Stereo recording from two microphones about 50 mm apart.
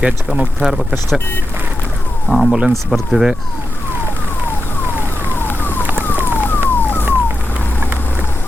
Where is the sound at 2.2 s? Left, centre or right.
Centre.